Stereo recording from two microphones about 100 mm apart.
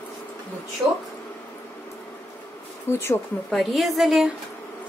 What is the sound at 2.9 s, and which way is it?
Speech, 25° left (ahead or behind).